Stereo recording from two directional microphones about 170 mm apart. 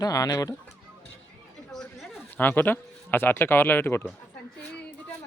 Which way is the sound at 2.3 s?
10° left (ahead or behind).